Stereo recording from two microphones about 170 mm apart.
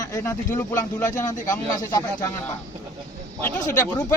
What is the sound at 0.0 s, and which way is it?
Speech, 15° left (ahead or behind).